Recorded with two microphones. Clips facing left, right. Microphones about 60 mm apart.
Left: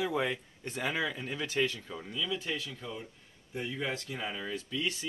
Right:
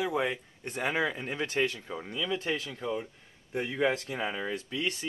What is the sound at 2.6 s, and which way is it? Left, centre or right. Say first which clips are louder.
Speech: right 8 dB; right.